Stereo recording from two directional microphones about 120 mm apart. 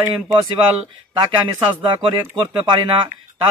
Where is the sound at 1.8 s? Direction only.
45° right (ahead or behind).